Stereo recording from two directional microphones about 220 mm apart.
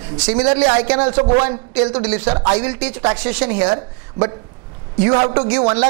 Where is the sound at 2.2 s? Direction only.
25° right (ahead or behind).